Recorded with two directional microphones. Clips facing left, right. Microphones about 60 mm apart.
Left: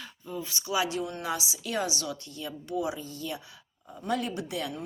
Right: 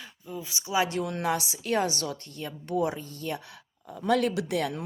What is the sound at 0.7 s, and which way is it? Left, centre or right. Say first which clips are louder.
Speech: right 2 dB; right.